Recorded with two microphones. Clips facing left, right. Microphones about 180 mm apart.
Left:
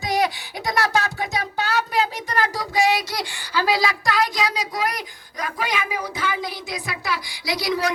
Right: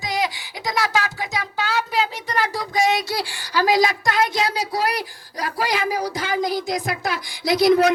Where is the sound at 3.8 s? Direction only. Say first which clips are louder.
Right 2 dB; 20° right (ahead or behind).